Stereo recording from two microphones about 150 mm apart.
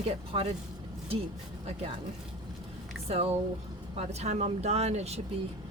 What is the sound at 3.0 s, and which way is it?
Speech, 45° right (ahead or behind).